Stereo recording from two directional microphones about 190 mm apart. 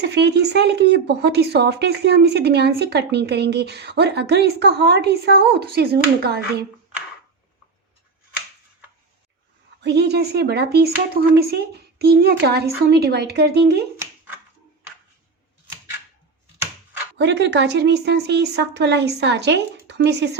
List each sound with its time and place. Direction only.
0.0 s speech: 65° right (ahead or behind)
9.8 s speech: 60° right (ahead or behind)
17.2 s speech: 65° right (ahead or behind)